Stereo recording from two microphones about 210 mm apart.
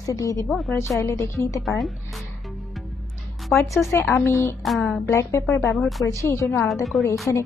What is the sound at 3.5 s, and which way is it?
A woman's voice, 5° left (ahead or behind).